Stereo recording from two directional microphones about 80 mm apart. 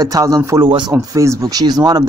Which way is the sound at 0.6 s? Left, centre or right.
Right.